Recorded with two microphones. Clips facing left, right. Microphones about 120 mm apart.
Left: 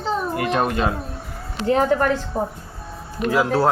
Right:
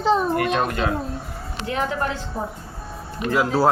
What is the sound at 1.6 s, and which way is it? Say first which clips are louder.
Speech: left 7 dB; 40° left (ahead or behind).